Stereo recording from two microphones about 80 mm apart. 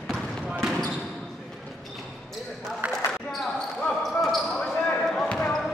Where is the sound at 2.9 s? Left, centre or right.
Centre.